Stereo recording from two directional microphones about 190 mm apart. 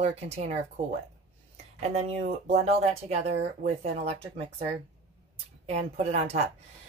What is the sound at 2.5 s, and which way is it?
Speech, 35° right (ahead or behind).